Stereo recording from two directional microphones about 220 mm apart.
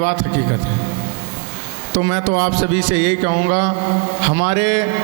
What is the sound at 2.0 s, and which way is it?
Mantra, 25° right (ahead or behind).